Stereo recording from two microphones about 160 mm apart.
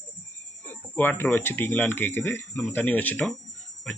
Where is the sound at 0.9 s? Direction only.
10° left (ahead or behind).